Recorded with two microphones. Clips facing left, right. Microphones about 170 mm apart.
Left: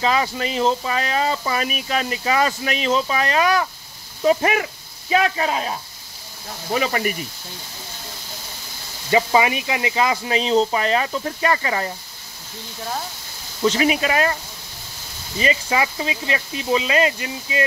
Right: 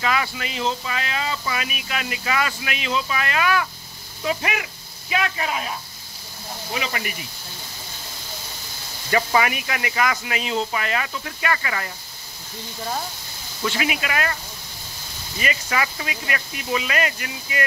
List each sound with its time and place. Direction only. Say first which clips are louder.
0.0 s speech: left 4 dB; 30° left (ahead or behind)
9.1 s speech: left 3 dB; 20° left (ahead or behind)
13.7 s speech: left 7 dB; 35° left (ahead or behind)